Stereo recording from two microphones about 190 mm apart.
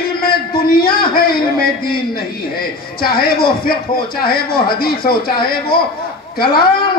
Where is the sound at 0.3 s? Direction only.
50° left (ahead or behind).